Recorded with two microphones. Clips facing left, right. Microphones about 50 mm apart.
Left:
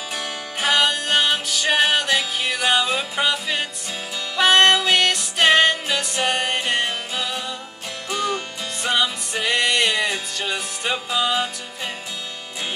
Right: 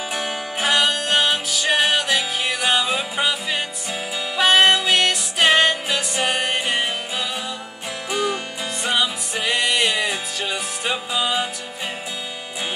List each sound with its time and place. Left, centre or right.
0.1 s music: centre
0.7 s music: centre